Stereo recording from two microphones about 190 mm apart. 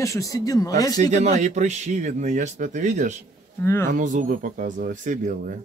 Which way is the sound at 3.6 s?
15° left (ahead or behind).